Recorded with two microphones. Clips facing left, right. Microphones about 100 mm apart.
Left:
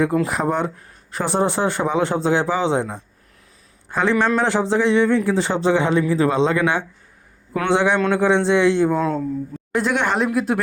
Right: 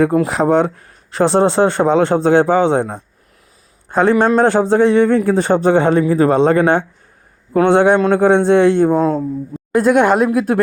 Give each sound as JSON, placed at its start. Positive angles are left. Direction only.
{"t": 0.3, "sound": "a man's voice", "side_deg": -70}
{"t": 8.9, "sound": "a man's voice", "side_deg": -40}